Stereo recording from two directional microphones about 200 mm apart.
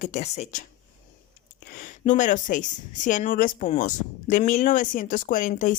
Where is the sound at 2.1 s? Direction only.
40° left (ahead or behind).